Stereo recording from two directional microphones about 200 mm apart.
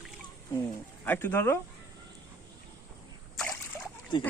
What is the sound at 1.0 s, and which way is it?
Speech, 10° left (ahead or behind).